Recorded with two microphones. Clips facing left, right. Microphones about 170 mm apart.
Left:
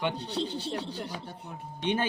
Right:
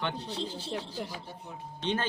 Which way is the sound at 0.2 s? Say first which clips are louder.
Left 4 dB; 70° left (ahead or behind).